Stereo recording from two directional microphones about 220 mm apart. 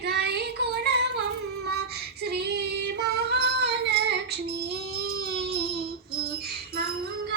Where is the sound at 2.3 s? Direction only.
50° right (ahead or behind).